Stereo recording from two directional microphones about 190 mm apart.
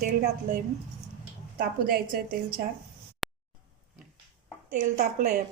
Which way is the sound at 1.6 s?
50° right (ahead or behind).